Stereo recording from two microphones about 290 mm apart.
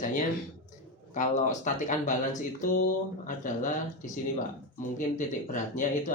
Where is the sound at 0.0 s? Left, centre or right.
Left.